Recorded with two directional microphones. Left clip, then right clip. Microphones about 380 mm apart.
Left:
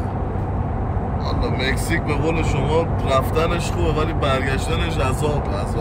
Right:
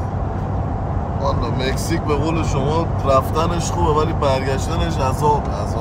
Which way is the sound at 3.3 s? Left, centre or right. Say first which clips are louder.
Even; centre.